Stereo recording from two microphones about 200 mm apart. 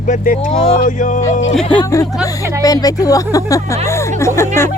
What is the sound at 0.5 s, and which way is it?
Speech, 25° left (ahead or behind).